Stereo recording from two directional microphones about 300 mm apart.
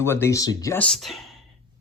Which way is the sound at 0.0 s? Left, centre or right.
Centre.